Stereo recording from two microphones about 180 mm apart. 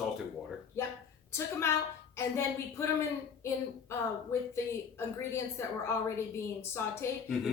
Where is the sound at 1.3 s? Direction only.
15° left (ahead or behind).